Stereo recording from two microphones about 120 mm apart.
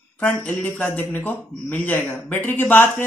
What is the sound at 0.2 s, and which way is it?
A man's voice, 10° left (ahead or behind).